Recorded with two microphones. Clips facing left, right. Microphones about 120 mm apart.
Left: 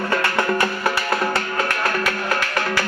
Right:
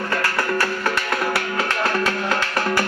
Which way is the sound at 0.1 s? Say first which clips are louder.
Left 2 dB; 25° left (ahead or behind).